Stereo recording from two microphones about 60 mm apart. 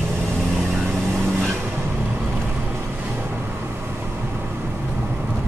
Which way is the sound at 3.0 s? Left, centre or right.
Right.